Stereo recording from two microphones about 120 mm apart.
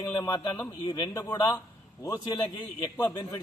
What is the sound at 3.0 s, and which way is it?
Speech, 15° left (ahead or behind).